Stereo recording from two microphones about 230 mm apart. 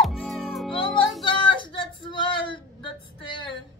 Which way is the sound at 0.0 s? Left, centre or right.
Centre.